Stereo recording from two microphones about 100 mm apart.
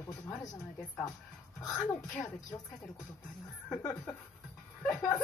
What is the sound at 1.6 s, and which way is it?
Speech, 35° left (ahead or behind).